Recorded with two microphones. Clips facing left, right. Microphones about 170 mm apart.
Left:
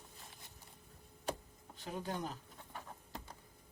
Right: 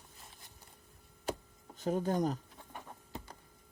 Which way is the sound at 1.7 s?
45° right (ahead or behind).